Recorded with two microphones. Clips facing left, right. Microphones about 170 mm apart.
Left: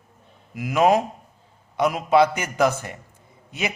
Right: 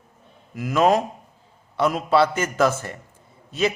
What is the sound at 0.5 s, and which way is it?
A man's voice, 15° left (ahead or behind).